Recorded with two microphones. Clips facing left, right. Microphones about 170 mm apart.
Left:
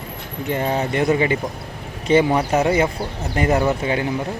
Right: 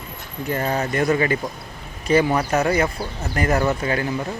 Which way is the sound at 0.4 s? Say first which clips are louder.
Left 2 dB; 20° left (ahead or behind).